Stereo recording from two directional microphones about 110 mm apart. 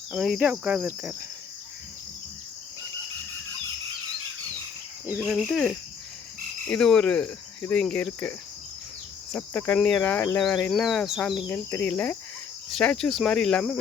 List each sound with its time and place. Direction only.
0.1 s insect: 5° right (ahead or behind)
5.0 s insect: 10° right (ahead or behind)
5.5 s speech: 5° left (ahead or behind)
6.7 s cricket: 5° left (ahead or behind)
9.7 s speech: 10° left (ahead or behind)
11.4 s cricket: 20° left (ahead or behind)
12.7 s speech: 5° left (ahead or behind)